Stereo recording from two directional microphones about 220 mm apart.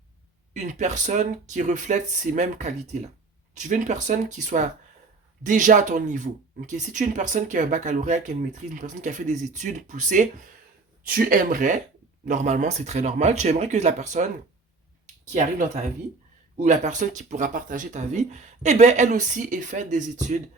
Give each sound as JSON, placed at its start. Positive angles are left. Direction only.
{"t": 0.5, "sound": "speech", "side_deg": -35}
{"t": 15.3, "sound": "speech", "side_deg": -35}